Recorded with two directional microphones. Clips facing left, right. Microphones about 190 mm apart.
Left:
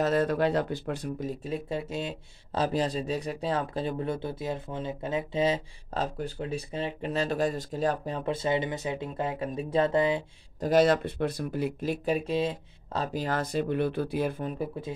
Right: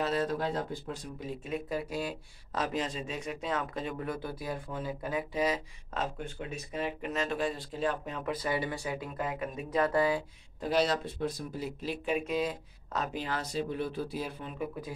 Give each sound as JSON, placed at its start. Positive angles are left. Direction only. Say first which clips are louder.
{"t": 0.0, "sound": "speech", "louder": "left 6 dB", "side_deg": 55}
{"t": 1.2, "sound": "speech", "louder": "left 3 dB", "side_deg": 35}
{"t": 10.6, "sound": "speech", "louder": "left 6 dB", "side_deg": 50}